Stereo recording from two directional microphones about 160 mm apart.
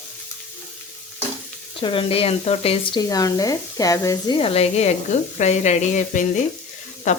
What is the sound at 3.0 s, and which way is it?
Speech, 20° left (ahead or behind).